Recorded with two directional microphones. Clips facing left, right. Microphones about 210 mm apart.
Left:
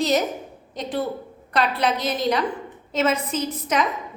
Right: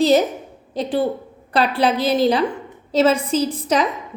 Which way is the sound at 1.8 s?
30° right (ahead or behind).